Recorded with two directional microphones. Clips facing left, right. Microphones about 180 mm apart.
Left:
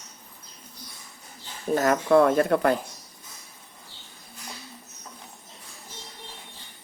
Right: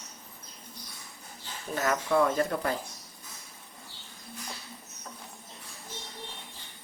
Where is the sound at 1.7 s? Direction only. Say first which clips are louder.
Left 6 dB; 45° left (ahead or behind).